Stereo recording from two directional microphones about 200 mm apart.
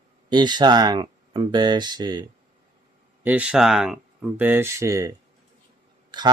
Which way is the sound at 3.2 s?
5° right (ahead or behind).